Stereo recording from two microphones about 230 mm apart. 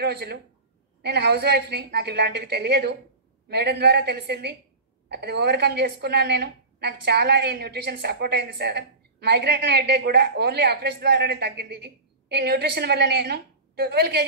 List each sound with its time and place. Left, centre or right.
0.0 s a woman's voice: right